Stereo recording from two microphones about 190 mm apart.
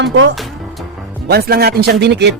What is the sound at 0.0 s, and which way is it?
Speech, 65° right (ahead or behind).